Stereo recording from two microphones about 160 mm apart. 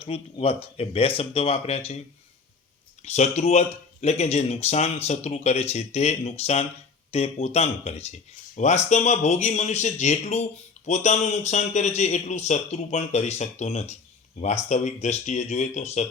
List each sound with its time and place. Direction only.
0.0 s speech: 35° left (ahead or behind)
3.0 s a man's voice: 45° left (ahead or behind)